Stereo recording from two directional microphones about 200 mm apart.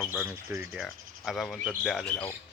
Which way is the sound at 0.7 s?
Centre (ahead or behind).